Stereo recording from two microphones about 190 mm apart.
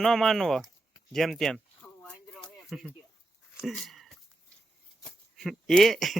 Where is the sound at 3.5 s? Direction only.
Centre (ahead or behind).